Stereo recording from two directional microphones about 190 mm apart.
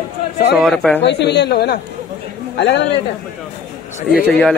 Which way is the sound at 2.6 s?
70° left (ahead or behind).